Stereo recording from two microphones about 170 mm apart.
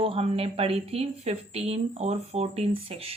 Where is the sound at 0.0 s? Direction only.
35° right (ahead or behind).